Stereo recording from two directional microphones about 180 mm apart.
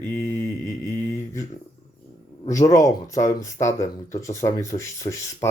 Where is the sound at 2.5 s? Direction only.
20° left (ahead or behind).